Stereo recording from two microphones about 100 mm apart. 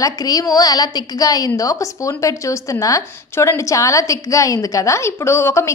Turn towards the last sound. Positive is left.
turn(degrees=25)  # may be behind; listen again after turning